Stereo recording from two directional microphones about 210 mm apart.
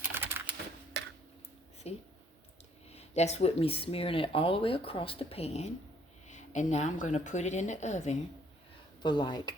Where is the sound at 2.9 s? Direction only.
30° left (ahead or behind).